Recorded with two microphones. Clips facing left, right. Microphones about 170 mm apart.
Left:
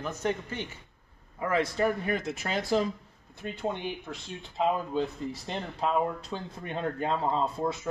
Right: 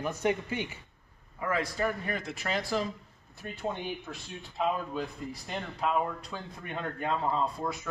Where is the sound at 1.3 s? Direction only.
25° left (ahead or behind).